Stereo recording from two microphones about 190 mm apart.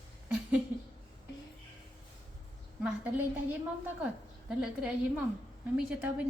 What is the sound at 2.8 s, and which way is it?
A woman's voice, 10° right (ahead or behind).